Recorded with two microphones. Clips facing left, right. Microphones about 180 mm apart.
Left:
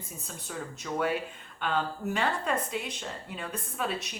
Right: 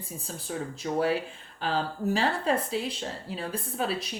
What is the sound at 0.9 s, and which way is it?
Speech, 30° right (ahead or behind).